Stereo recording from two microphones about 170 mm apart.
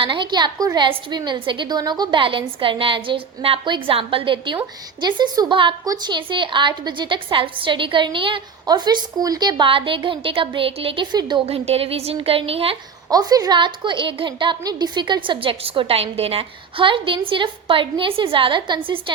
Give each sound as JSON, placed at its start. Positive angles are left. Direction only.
{"t": 0.0, "sound": "a woman's voice", "side_deg": -30}
{"t": 13.1, "sound": "a woman's voice", "side_deg": -20}